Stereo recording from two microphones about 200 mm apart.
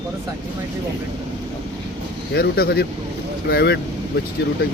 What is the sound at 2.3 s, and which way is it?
Speech, 50° left (ahead or behind).